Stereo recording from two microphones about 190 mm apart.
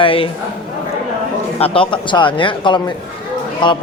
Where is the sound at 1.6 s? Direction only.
25° left (ahead or behind).